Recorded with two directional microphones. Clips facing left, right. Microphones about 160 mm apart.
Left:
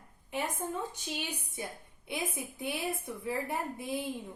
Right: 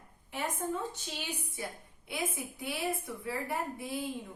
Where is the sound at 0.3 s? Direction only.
15° left (ahead or behind).